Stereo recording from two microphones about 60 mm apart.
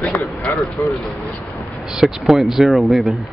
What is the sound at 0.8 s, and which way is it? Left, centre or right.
Speech, left.